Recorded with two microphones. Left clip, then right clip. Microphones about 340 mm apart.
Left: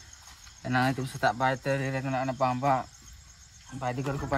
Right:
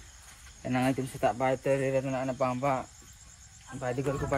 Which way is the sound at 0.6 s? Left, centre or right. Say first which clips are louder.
Left 2 dB; centre.